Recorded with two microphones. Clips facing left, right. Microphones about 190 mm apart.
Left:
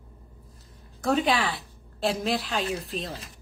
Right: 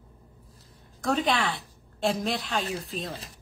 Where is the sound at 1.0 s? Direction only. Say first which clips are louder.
Left 2 dB; 5° left (ahead or behind).